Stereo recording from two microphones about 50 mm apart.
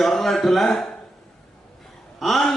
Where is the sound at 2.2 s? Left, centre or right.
Centre.